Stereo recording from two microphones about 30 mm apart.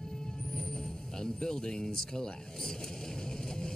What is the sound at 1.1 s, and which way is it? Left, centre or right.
Speech, centre.